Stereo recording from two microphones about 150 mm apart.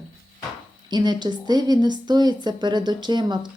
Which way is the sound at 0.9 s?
30° right (ahead or behind).